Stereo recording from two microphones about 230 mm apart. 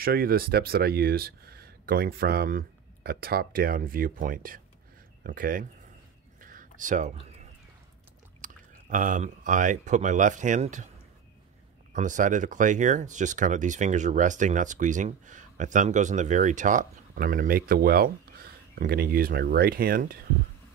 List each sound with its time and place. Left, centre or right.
0.0 s speech: right
6.4 s whispering: right
8.4 s speech: right
11.9 s speech: right